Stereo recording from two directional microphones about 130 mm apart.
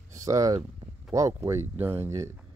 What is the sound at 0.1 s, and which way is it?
Speech, 25° right (ahead or behind).